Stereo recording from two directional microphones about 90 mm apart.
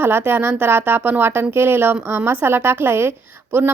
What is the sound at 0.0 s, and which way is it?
A woman's voice, 20° right (ahead or behind).